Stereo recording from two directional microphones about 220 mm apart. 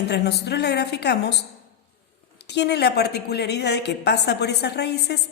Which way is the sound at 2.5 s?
50° left (ahead or behind).